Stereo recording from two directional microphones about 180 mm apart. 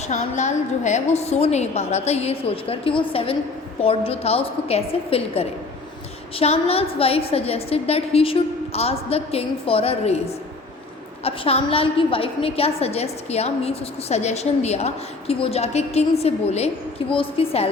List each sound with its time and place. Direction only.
0.0 s a woman's voice: 40° left (ahead or behind)